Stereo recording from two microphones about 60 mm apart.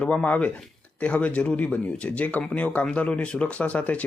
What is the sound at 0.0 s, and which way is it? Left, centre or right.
Speech, left.